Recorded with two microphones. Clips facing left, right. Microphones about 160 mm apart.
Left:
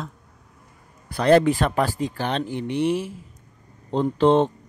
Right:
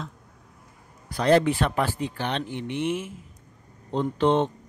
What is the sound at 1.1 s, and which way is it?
Speech, 60° left (ahead or behind).